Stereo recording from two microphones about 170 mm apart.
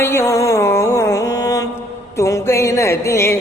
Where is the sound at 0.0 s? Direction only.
15° left (ahead or behind).